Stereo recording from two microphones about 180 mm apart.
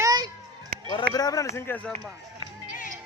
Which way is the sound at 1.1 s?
20° left (ahead or behind).